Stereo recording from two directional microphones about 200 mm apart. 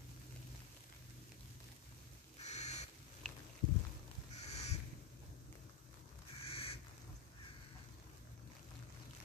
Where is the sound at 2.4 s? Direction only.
35° left (ahead or behind).